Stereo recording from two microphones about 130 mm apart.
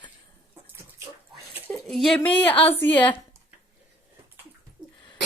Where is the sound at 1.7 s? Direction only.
Centre (ahead or behind).